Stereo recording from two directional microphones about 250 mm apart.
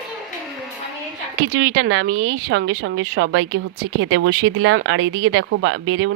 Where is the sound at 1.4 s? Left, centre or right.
Right.